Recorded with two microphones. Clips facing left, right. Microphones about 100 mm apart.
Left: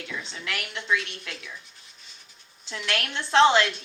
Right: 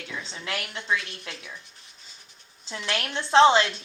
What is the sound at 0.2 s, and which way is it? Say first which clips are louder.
Speech: right 1 dB; 30° right (ahead or behind).